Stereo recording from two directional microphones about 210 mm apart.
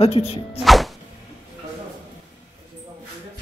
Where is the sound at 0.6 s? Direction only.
Centre (ahead or behind).